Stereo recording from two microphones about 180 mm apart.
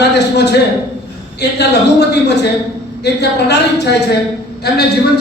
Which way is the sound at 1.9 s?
70° left (ahead or behind).